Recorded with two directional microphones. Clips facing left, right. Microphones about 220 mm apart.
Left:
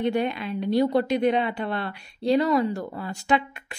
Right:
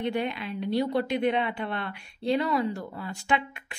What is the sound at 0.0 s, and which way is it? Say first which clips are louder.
Speech: left 4 dB; 45° left (ahead or behind).